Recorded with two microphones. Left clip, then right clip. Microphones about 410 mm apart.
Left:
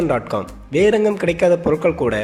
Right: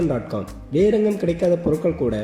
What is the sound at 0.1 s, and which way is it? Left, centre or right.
Speech, centre.